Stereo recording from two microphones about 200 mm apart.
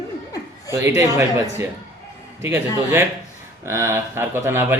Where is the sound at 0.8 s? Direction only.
10° right (ahead or behind).